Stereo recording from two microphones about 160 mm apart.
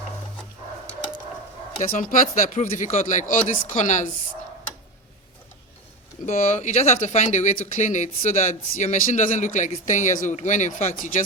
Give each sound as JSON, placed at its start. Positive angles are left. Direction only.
{"t": 1.9, "sound": "speech", "side_deg": 60}
{"t": 6.2, "sound": "speech", "side_deg": 50}